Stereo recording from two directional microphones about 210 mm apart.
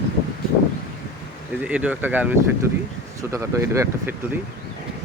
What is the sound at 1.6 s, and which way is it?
Speech, 5° right (ahead or behind).